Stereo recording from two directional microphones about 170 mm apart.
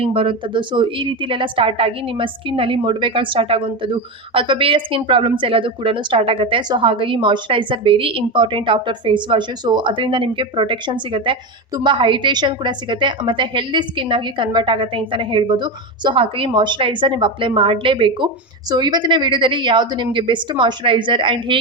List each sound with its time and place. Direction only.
0.0 s a woman's voice: 30° right (ahead or behind)